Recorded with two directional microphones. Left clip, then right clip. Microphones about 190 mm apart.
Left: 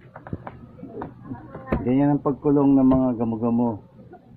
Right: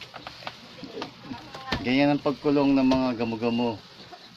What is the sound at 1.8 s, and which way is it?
Speech, 10° right (ahead or behind).